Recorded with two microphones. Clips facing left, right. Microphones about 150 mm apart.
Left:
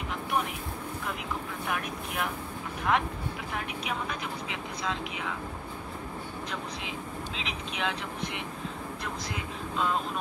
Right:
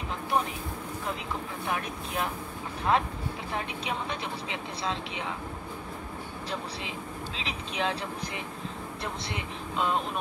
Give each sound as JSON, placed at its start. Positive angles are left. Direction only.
{"t": 1.7, "sound": "speech", "side_deg": -30}
{"t": 7.4, "sound": "speech", "side_deg": -35}